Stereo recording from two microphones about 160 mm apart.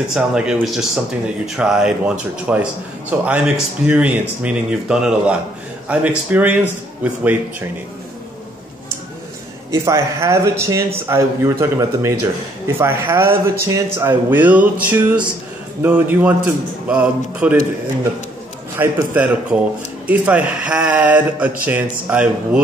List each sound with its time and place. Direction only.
0.1 s a man's voice: 5° right (ahead or behind)
9.7 s a man's voice: 20° right (ahead or behind)
18.8 s a man's voice: 10° right (ahead or behind)